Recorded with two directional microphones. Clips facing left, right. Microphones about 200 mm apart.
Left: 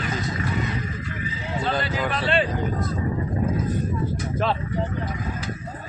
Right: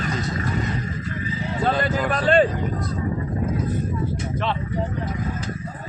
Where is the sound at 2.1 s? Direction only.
45° right (ahead or behind).